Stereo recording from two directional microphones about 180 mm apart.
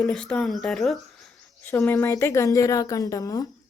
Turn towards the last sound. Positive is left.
turn(degrees=20)  # may be behind; listen again after turning